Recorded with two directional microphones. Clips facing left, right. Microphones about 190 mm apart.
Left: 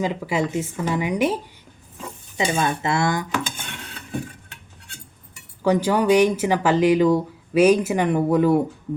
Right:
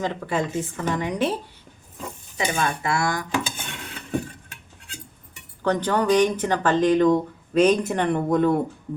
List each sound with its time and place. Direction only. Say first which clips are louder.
0.0 s speech: left 2 dB; 10° left (ahead or behind)
2.4 s speech: left 3 dB; 25° left (ahead or behind)
5.6 s speech: left 3 dB; 10° left (ahead or behind)